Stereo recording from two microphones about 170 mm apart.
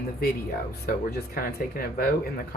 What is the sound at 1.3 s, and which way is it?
Speech, 60° left (ahead or behind).